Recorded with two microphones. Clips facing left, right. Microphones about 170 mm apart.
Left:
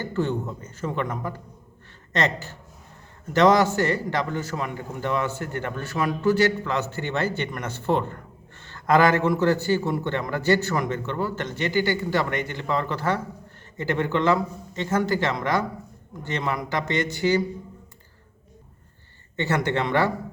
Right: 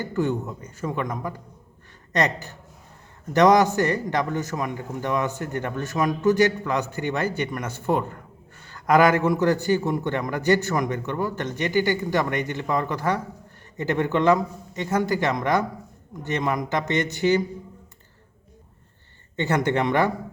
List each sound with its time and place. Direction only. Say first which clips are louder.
0.0 s a man's voice: right 1 dB; 15° right (ahead or behind)
19.4 s a man's voice: right 2 dB; 20° right (ahead or behind)